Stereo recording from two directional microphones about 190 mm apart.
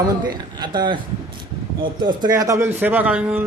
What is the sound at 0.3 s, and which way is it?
A man's voice, 20° right (ahead or behind).